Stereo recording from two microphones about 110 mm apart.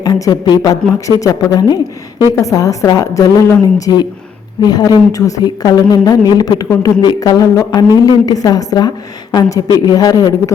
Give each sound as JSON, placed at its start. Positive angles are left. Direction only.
{"t": 0.0, "sound": "a woman's voice", "side_deg": 35}